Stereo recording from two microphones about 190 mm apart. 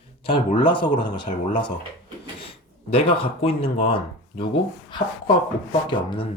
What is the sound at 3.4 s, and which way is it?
Speech, 30° left (ahead or behind).